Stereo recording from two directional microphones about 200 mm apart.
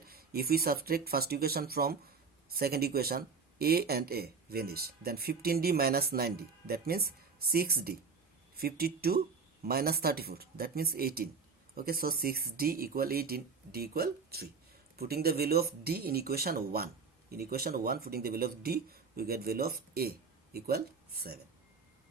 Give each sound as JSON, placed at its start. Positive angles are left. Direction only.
{"t": 0.0, "sound": "speech", "side_deg": -50}